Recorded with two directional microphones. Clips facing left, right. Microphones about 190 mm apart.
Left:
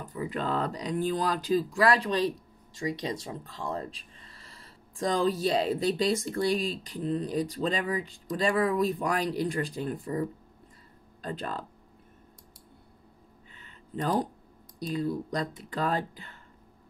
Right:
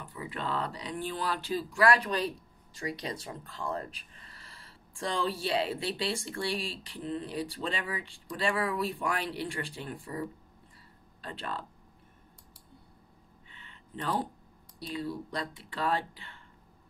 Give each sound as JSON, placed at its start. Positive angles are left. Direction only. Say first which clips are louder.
{"t": 0.0, "sound": "speech", "louder": "left 5 dB", "side_deg": 40}
{"t": 3.3, "sound": "speech", "louder": "left 2 dB", "side_deg": 30}
{"t": 13.5, "sound": "a sound", "louder": "left 5 dB", "side_deg": 40}
{"t": 14.8, "sound": "speech", "louder": "left 6 dB", "side_deg": 45}